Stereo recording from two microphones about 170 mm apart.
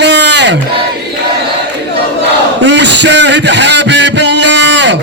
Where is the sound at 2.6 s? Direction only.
90° right.